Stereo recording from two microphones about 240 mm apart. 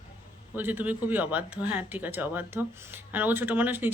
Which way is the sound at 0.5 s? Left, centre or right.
Centre.